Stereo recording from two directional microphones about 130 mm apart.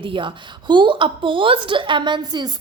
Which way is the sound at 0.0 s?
40° right (ahead or behind).